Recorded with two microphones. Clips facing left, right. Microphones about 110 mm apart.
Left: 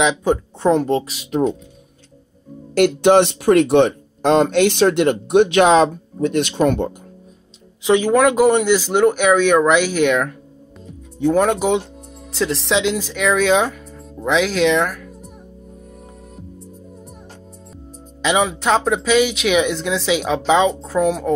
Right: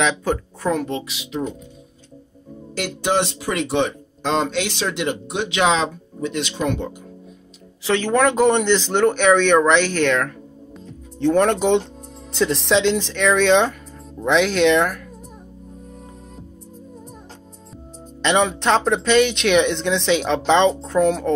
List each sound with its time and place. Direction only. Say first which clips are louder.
0.0 s speech: left 4 dB; 20° left (ahead or behind); by 1.4 s 45° left (ahead or behind)
2.7 s speech: left 9 dB; 60° left (ahead or behind)
7.8 s speech: left 4 dB; 15° left (ahead or behind)
18.2 s speech: even; 5° left (ahead or behind)